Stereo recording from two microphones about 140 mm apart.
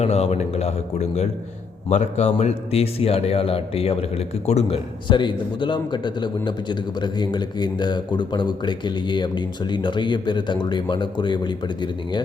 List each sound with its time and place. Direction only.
0.0 s a man's voice: 50° left (ahead or behind)
5.0 s a man's voice: 35° left (ahead or behind)